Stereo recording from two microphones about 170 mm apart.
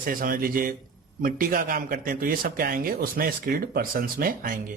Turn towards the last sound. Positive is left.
turn(degrees=-55)  # may be behind; listen again after turning